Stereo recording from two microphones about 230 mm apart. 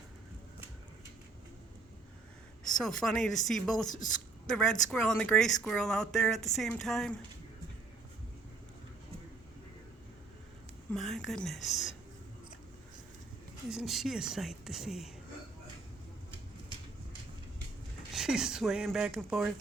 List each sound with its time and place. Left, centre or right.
2.7 s speech: centre
10.9 s speech: centre
13.7 s speech: centre
18.1 s speech: centre